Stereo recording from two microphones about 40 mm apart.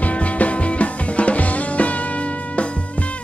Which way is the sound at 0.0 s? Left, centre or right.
Left.